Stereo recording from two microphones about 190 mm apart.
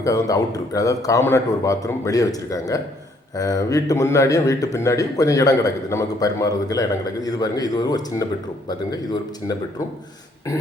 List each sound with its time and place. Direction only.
0.0 s a man's voice: 20° left (ahead or behind)